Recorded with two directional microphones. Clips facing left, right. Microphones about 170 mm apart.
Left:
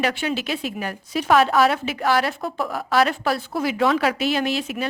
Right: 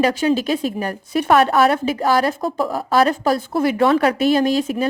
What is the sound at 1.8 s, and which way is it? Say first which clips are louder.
Speech: right 4 dB; 40° right (ahead or behind).